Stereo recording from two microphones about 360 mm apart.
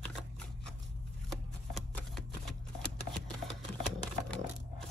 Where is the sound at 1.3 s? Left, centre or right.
Centre.